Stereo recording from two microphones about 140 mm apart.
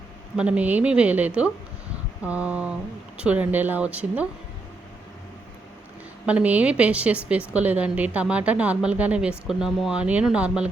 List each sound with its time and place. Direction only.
0.3 s a woman's voice: 10° right (ahead or behind)
6.2 s a woman's voice: 10° right (ahead or behind)